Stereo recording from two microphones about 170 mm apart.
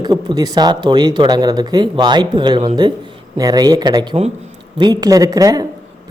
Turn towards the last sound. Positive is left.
turn(degrees=-20)  # may be behind; listen again after turning